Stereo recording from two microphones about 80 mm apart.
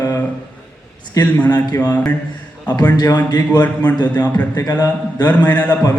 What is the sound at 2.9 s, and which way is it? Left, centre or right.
Speech, left.